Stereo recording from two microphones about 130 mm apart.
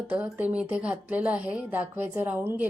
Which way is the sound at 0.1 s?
10° right (ahead or behind).